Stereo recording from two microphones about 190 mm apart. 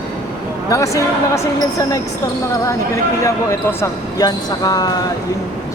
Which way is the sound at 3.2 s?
15° left (ahead or behind).